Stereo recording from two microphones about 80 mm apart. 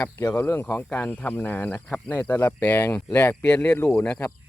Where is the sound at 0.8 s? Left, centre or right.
Left.